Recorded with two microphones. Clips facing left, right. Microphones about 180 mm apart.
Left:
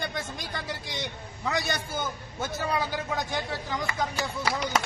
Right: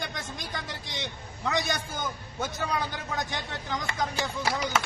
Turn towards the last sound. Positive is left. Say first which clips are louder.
# even
turn(degrees=5)  # may be behind; listen again after turning